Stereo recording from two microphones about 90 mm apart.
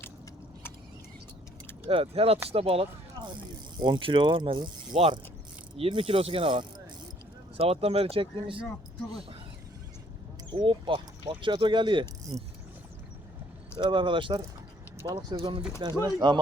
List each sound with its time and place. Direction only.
1.9 s speech: 90° right
3.2 s mechanisms: 45° right (ahead or behind)
3.8 s speech: 60° right (ahead or behind); by 5.2 s 75° right (ahead or behind)
5.7 s speech: 90° right; by 6.8 s 60° right (ahead or behind)
7.5 s speech: 90° right
10.5 s speech: 70° right (ahead or behind)
12.3 s speech: 90° right
13.7 s speech: 60° right (ahead or behind)
15.8 s speech: 55° right (ahead or behind)